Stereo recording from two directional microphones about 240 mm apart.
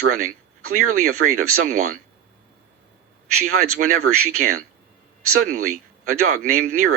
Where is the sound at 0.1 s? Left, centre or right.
Right.